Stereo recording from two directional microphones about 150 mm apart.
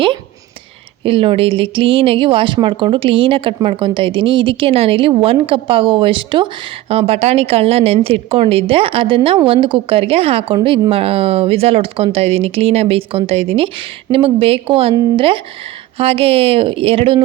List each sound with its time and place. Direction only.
1.0 s speech: 35° right (ahead or behind)